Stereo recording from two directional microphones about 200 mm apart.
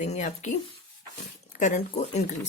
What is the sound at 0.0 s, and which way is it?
Speech, 35° left (ahead or behind).